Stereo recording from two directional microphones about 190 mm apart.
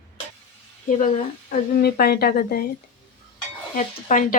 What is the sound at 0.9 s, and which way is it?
A woman's voice, 40° left (ahead or behind).